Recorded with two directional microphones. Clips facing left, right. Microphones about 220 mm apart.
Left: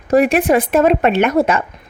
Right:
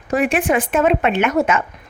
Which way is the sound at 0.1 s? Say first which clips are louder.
Left 5 dB; 35° left (ahead or behind).